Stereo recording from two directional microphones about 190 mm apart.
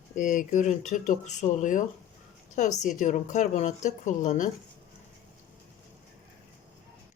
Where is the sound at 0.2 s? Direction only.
45° left (ahead or behind).